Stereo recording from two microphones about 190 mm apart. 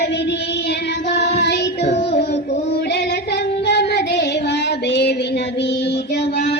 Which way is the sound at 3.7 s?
60° left (ahead or behind).